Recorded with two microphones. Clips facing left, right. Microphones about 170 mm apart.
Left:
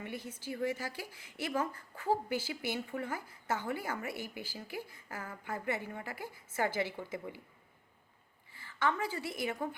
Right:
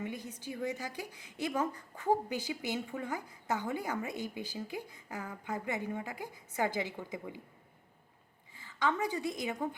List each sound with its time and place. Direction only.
0.0 s a woman's voice: 15° right (ahead or behind)
8.5 s a woman's voice: 15° right (ahead or behind)